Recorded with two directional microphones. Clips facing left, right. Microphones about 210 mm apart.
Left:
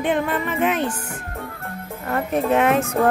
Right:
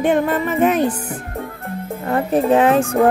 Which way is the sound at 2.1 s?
30° right (ahead or behind).